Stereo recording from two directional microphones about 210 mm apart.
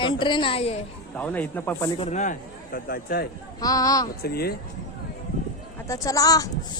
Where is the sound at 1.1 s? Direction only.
5° left (ahead or behind).